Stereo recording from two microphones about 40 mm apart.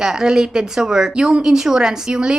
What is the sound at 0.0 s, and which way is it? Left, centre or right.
A woman's voice, centre.